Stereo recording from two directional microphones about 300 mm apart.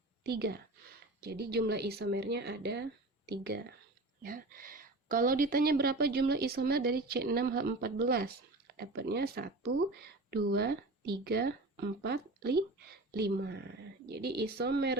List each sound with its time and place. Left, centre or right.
0.3 s a woman's voice: right